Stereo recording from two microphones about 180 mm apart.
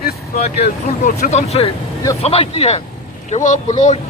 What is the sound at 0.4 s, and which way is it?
Speech, 35° left (ahead or behind).